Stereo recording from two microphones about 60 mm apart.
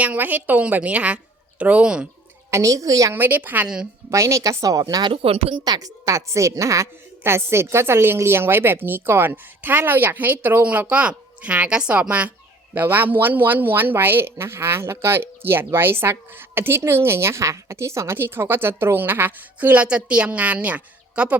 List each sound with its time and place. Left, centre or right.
0.0 s a woman's voice: right
2.5 s speech: right
3.1 s a woman's voice: right
4.1 s speech: right
5.8 s a woman's voice: right
7.3 s a woman's voice: right
12.7 s a woman's voice: right
18.2 s a woman's voice: right